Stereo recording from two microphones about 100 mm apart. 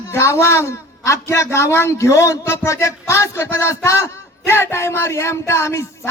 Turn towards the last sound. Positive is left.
turn(degrees=25)  # may be behind; listen again after turning